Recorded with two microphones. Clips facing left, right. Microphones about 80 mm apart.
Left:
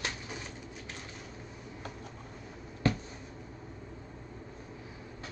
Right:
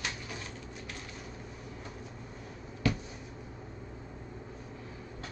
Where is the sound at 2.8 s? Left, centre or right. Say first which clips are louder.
Left 1 dB; left.